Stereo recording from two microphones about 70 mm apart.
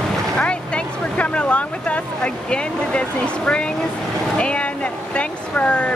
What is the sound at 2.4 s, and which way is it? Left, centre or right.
Speech, centre.